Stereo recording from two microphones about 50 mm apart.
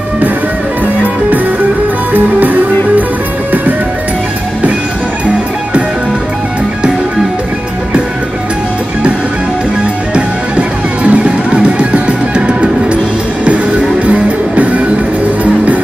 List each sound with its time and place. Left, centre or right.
11.1 s music: right